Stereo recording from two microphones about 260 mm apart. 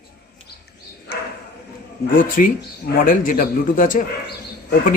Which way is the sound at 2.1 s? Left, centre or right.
Left.